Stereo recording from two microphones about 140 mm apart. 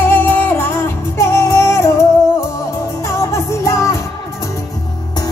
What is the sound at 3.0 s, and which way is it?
Music, 20° left (ahead or behind).